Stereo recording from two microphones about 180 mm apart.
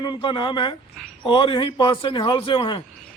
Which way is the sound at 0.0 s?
25° left (ahead or behind).